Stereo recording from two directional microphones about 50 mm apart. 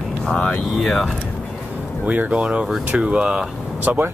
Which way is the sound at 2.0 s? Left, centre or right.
Right.